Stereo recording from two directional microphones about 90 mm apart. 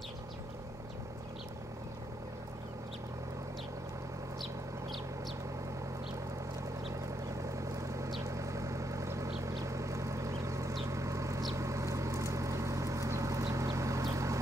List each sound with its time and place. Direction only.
7.4 s vehicle: 35° right (ahead or behind)
9.4 s a sound: 35° right (ahead or behind)
11.5 s vehicle: 35° right (ahead or behind)